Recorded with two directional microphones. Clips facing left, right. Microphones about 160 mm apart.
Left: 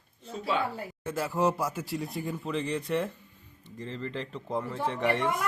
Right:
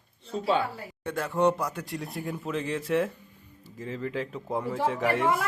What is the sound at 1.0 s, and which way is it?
Speech, 5° left (ahead or behind).